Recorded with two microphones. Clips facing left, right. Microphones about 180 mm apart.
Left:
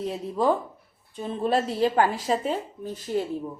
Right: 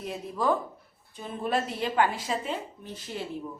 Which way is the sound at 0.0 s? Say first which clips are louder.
Left 5 dB; 30° left (ahead or behind).